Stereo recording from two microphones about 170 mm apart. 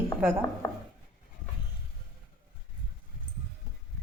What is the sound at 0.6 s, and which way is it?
Chopping, 20° left (ahead or behind).